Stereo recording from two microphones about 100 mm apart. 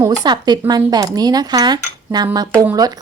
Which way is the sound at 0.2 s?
45° right (ahead or behind).